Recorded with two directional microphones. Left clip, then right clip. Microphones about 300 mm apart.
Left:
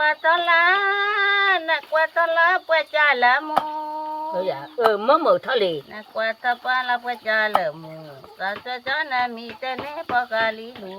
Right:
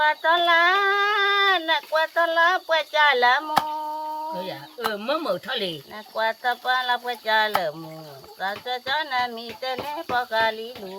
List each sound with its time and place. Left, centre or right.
0.0 s speech: centre
4.4 s speech: centre
6.1 s speech: centre